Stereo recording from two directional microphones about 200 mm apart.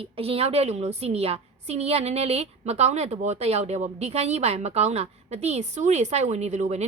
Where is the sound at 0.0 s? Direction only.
30° right (ahead or behind).